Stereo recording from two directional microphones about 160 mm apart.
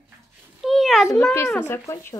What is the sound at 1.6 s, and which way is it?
Speech, 15° left (ahead or behind).